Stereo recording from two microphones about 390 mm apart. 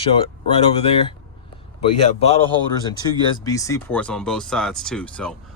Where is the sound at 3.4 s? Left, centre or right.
Centre.